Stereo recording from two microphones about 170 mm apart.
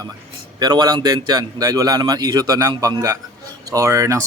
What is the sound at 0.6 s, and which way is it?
A man's voice, 25° right (ahead or behind).